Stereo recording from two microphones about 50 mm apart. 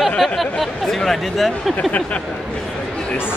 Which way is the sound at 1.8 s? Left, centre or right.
Left.